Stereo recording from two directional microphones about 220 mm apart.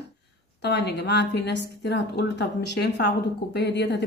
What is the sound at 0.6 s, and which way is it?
A woman's voice, 50° left (ahead or behind).